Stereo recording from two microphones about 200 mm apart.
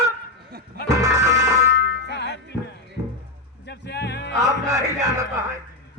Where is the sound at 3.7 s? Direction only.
60° left (ahead or behind).